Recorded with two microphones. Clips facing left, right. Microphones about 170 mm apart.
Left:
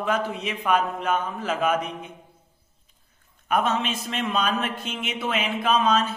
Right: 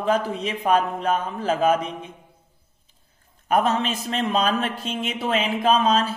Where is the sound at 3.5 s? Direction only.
35° right (ahead or behind).